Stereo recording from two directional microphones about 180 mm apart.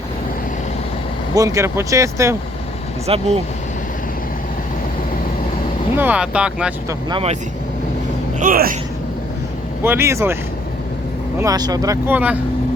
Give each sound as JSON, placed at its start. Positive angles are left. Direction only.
{"t": 1.4, "sound": "speech", "side_deg": -20}
{"t": 3.1, "sound": "speech", "side_deg": -35}
{"t": 6.0, "sound": "speech", "side_deg": -10}
{"t": 7.1, "sound": "speech", "side_deg": -35}
{"t": 8.4, "sound": "speech", "side_deg": -50}
{"t": 9.8, "sound": "speech", "side_deg": -15}
{"t": 11.3, "sound": "speech", "side_deg": -20}